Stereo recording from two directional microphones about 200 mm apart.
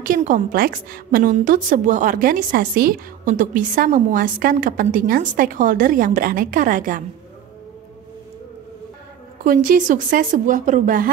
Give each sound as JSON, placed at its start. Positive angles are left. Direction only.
{"t": 0.0, "sound": "a woman's voice", "side_deg": -40}
{"t": 9.4, "sound": "a woman's voice", "side_deg": -45}